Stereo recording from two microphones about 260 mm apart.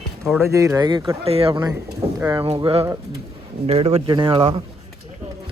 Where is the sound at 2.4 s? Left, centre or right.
Right.